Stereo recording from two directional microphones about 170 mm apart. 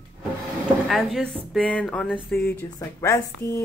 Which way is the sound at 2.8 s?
20° left (ahead or behind).